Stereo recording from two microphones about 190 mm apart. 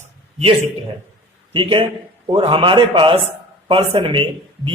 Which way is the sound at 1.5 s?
25° right (ahead or behind).